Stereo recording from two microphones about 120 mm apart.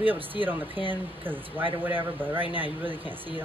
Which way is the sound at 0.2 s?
50° right (ahead or behind).